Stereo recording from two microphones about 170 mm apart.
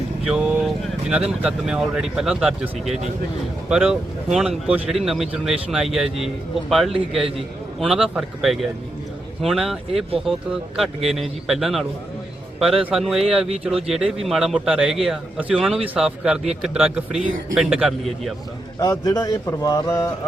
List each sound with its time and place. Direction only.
0.3 s vehicle: 5° right (ahead or behind)
1.1 s a man's voice: 5° right (ahead or behind)
10.8 s a man's voice: centre (ahead or behind)
18.8 s a man's voice: 20° left (ahead or behind)